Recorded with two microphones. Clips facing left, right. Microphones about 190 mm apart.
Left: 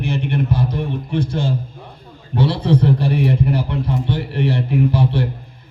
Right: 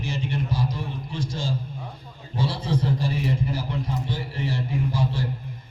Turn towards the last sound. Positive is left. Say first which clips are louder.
# left 9 dB
turn(degrees=65)  # may be behind; listen again after turning